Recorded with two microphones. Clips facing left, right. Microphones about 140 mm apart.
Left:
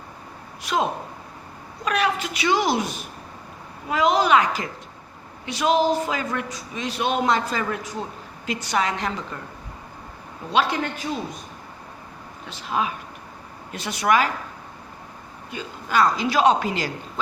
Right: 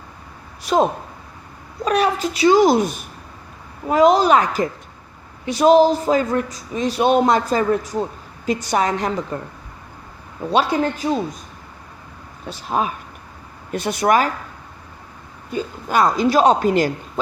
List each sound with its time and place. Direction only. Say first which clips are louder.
0.6 s a man's voice: right 6 dB; 35° right (ahead or behind)
10.5 s a man's voice: right 4 dB; 40° right (ahead or behind)
12.5 s a man's voice: right 4 dB; 40° right (ahead or behind)
15.5 s speech: right 3 dB; 45° right (ahead or behind)